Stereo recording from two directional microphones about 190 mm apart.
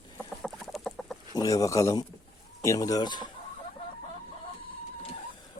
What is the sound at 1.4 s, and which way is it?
Speech, 15° left (ahead or behind).